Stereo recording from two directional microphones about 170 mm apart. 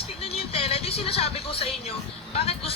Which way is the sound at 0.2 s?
35° left (ahead or behind).